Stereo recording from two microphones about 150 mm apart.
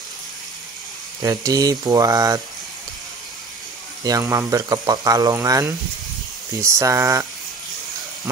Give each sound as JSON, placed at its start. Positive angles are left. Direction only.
{"t": 1.2, "sound": "speech", "side_deg": -25}
{"t": 4.0, "sound": "speech", "side_deg": -20}